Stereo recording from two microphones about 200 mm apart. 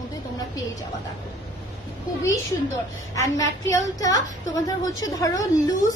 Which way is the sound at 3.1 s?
15° left (ahead or behind).